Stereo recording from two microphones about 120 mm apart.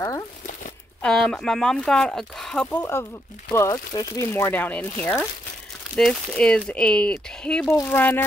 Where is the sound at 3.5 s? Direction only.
25° left (ahead or behind).